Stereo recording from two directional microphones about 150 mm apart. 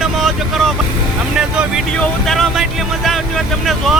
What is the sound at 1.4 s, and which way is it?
Speech, 5° right (ahead or behind).